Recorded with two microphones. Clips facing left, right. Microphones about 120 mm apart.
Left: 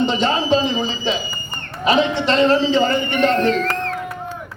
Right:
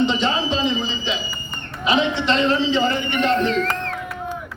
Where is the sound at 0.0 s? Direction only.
45° left (ahead or behind).